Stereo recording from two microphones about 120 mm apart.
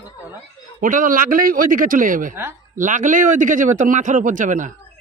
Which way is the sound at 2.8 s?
90° right.